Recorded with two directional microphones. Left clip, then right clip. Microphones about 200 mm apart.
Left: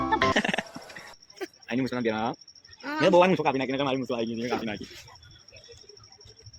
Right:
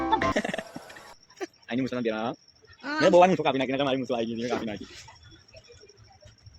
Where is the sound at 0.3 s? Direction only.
45° left (ahead or behind).